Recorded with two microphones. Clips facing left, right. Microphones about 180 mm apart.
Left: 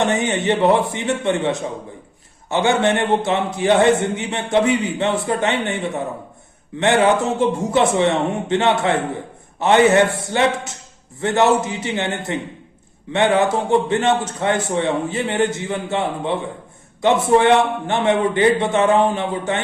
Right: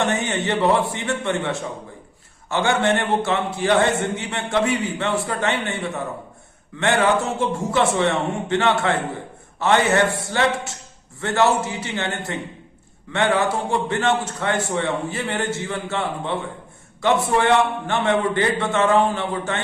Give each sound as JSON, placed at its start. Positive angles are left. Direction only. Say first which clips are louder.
{"t": 0.0, "sound": "a man's voice", "louder": "left 3 dB", "side_deg": 20}